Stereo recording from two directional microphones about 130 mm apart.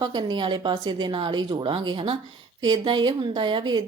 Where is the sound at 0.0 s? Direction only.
35° right (ahead or behind).